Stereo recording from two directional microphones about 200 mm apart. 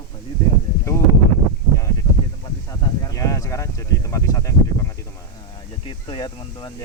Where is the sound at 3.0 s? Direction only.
15° left (ahead or behind).